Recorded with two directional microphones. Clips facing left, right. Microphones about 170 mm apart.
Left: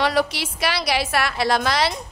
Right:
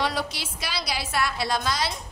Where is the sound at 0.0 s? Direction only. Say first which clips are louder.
Left 7 dB; 75° left (ahead or behind).